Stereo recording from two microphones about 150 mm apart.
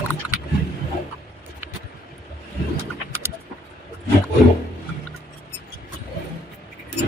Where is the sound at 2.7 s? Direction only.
15° right (ahead or behind).